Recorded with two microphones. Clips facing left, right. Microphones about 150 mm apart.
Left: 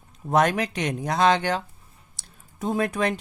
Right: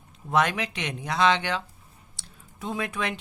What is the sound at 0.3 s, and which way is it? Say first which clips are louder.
Speech: left 4 dB; 40° left (ahead or behind).